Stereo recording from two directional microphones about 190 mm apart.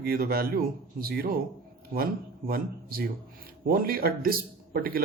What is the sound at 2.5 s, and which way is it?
Speech, 50° right (ahead or behind).